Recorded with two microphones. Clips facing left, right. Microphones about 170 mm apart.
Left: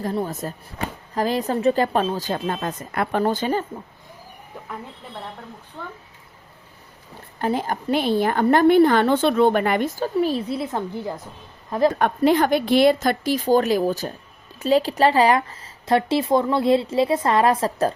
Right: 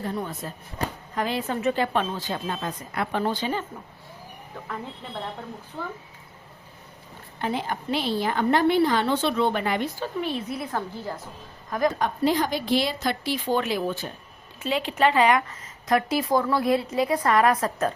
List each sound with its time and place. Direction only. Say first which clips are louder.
0.0 s a woman's voice: left 5 dB; 35° left (ahead or behind)
5.8 s speech: right 2 dB; 5° right (ahead or behind)
7.3 s a woman's voice: left 5 dB; 45° left (ahead or behind); by 11.1 s 20° left (ahead or behind)
11.9 s a woman's voice: left 5 dB; 60° left (ahead or behind); by 17.9 s 30° left (ahead or behind)